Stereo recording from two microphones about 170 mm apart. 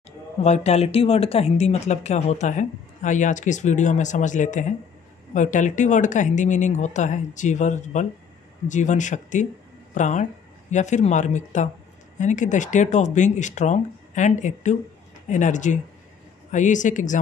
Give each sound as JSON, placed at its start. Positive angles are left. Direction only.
{"t": 0.4, "sound": "speech", "side_deg": 40}